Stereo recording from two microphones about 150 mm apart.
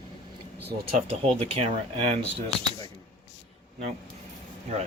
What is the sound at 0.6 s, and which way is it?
Speech, 90° right.